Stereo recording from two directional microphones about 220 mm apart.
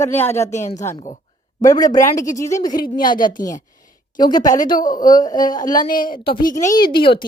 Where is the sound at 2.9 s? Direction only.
40° left (ahead or behind).